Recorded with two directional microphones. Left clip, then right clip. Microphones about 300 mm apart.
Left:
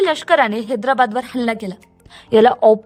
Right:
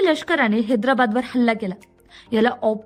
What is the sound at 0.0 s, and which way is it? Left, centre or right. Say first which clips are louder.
A woman's voice: left 4 dB; centre.